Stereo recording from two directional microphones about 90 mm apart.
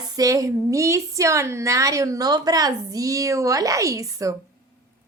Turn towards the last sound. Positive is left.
turn(degrees=-35)  # may be behind; listen again after turning